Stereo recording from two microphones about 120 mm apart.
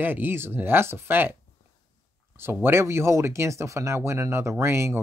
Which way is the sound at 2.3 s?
20° right (ahead or behind).